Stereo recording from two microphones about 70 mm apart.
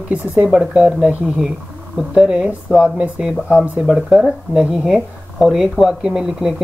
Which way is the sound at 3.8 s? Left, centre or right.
Centre.